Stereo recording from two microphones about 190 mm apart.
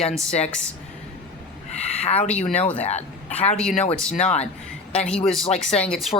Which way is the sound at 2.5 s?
5° left (ahead or behind).